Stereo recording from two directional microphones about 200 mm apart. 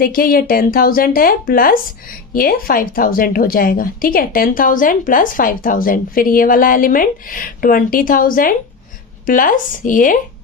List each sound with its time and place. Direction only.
0.0 s a woman's voice: 45° left (ahead or behind)